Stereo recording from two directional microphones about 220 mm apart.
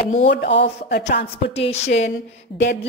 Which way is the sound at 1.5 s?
30° left (ahead or behind).